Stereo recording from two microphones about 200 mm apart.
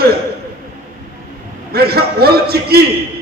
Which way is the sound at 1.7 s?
50° right (ahead or behind).